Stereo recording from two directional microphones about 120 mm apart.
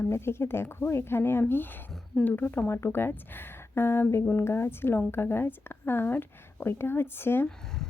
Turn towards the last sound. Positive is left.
turn(degrees=20)  # may be behind; listen again after turning